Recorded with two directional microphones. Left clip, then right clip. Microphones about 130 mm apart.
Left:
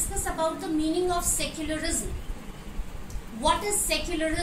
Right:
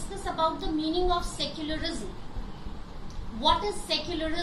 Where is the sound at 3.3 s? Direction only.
15° left (ahead or behind).